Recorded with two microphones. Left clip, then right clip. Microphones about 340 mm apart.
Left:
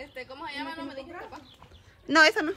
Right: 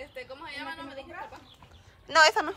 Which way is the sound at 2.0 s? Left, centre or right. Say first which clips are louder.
Left 1 dB; centre.